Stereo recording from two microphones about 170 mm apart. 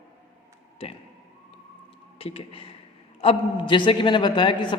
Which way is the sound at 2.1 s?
35° left (ahead or behind).